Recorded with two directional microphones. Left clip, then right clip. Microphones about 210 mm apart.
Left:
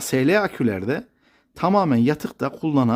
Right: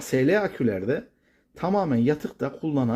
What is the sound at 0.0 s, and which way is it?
Speech, 25° left (ahead or behind).